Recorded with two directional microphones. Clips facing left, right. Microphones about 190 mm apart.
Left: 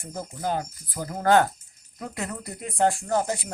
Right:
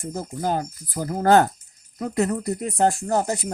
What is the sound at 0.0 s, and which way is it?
Speech, 40° right (ahead or behind).